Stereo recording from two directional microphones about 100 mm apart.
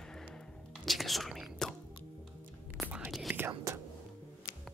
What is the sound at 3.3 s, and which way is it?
Whispering, 25° right (ahead or behind).